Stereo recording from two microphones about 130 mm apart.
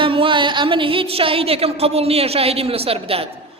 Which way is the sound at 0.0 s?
40° right (ahead or behind).